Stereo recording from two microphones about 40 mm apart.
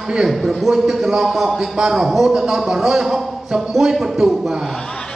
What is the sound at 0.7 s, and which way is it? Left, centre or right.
Speech, centre.